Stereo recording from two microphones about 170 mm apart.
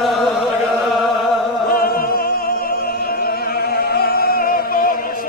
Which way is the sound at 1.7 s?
60° left (ahead or behind).